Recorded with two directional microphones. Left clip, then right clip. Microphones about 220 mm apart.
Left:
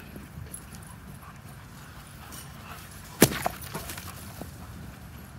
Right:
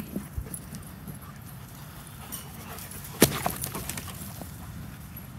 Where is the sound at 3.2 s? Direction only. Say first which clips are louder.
Left 1 dB; 5° left (ahead or behind).